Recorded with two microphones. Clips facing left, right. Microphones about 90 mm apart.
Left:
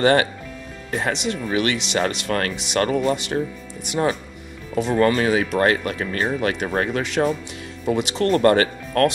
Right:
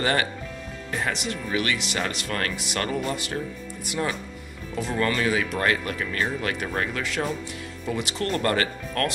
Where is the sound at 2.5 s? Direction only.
20° left (ahead or behind).